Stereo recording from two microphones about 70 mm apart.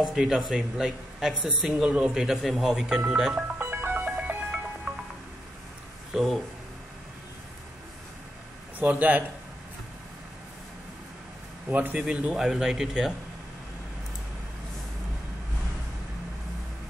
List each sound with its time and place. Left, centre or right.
0.0 s speech: centre
3.6 s music: right
6.1 s speech: centre
8.7 s speech: right
11.7 s speech: right
12.4 s speech: centre